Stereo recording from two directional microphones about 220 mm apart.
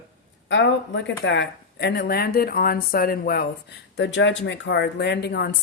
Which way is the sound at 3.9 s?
55° left (ahead or behind).